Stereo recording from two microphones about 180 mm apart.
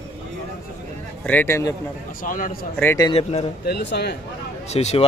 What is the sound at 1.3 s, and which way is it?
Speech, 10° left (ahead or behind).